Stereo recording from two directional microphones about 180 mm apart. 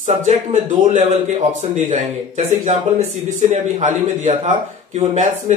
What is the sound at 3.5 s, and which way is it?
A man's voice, 45° right (ahead or behind).